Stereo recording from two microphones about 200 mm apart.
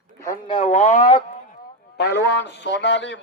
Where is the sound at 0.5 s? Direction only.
35° left (ahead or behind).